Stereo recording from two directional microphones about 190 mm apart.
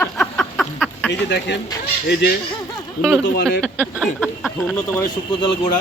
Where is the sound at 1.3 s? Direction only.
60° left (ahead or behind).